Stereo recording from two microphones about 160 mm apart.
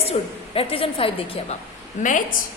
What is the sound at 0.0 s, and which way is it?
A woman's voice, 40° left (ahead or behind).